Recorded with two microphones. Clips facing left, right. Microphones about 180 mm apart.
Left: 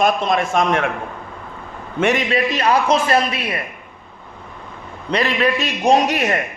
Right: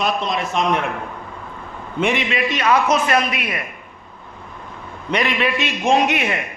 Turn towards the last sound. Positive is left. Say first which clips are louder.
# left 2 dB
turn(degrees=40)  # may be behind; listen again after turning